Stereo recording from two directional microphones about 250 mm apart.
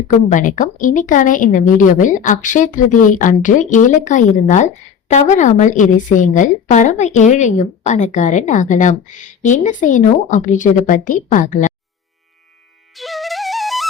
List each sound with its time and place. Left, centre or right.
0.3 s speech: left
13.0 s music: centre